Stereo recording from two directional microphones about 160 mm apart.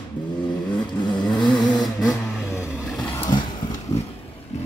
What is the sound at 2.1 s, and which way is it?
Vehicle, 20° left (ahead or behind).